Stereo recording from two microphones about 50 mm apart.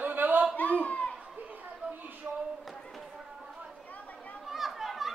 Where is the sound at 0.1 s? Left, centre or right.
Right.